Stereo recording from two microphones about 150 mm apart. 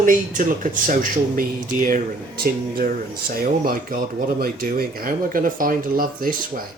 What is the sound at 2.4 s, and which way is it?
Speech, 85° right.